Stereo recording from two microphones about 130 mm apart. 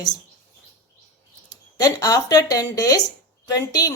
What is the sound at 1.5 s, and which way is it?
Speech, 30° left (ahead or behind).